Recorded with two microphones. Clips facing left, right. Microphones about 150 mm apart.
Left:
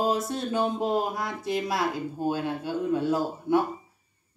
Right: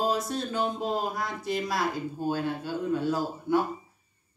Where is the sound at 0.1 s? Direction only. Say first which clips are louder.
Left 2 dB; 20° left (ahead or behind).